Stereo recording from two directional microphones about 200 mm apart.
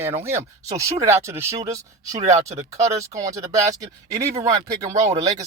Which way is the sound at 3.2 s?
15° right (ahead or behind).